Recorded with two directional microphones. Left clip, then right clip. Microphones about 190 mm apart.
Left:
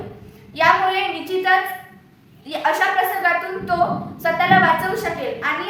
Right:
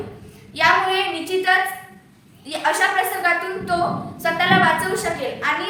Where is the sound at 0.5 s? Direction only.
15° left (ahead or behind).